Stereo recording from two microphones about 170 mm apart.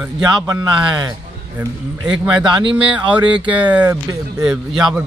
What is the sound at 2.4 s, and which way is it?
Speech, 25° right (ahead or behind).